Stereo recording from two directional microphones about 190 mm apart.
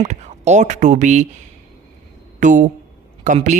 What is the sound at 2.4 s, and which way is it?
Speech, 40° right (ahead or behind).